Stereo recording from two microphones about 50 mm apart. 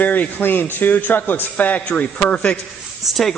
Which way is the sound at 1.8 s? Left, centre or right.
Left.